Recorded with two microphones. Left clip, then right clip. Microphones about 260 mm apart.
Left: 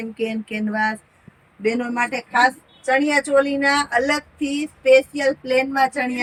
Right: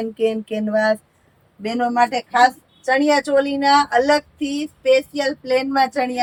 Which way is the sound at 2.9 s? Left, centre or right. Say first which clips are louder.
Right 2 dB; centre.